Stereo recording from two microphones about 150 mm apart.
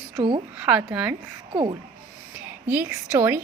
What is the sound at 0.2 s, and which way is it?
Speech, 35° right (ahead or behind).